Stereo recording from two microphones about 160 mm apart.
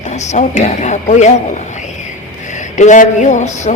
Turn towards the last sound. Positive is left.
turn(degrees=45)  # may be behind; listen again after turning